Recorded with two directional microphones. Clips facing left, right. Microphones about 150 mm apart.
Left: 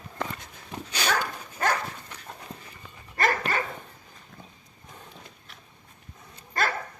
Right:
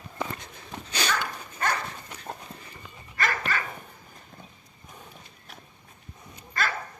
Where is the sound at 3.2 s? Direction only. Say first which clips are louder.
Left 3 dB; 35° left (ahead or behind).